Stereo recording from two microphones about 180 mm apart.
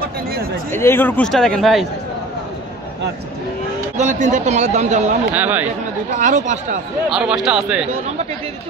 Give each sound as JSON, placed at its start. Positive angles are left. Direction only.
{"t": 0.7, "sound": "speech", "side_deg": 15}
{"t": 3.9, "sound": "speech", "side_deg": -40}
{"t": 5.3, "sound": "speech", "side_deg": -10}
{"t": 5.7, "sound": "speech", "side_deg": -40}
{"t": 7.1, "sound": "speech", "side_deg": -5}